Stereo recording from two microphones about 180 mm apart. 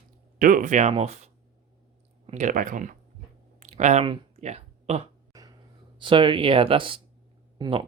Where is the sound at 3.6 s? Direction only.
40° right (ahead or behind).